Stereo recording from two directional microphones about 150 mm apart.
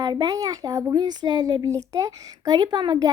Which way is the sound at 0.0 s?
25° right (ahead or behind).